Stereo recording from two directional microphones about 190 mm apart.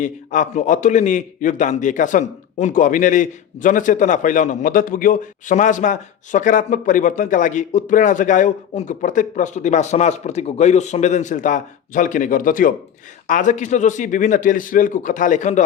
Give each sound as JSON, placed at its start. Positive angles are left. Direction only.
{"t": 0.0, "sound": "a man's voice", "side_deg": 40}